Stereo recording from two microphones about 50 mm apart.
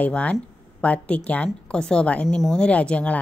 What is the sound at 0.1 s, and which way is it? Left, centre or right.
A woman's voice, left.